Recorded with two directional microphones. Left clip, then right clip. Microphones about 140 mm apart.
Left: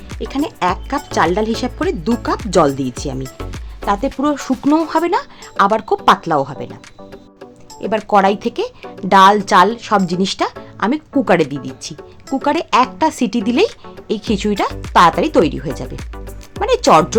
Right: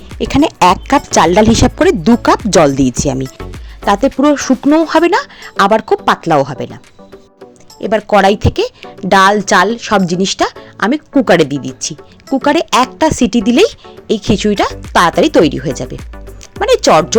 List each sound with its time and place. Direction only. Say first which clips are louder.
0.2 s speech: right 9 dB; 70° right (ahead or behind)
3.3 s music: right 1 dB; centre (ahead or behind)
3.8 s speech: right 7 dB; 35° right (ahead or behind)
7.8 s speech: right 4 dB; 30° right (ahead or behind)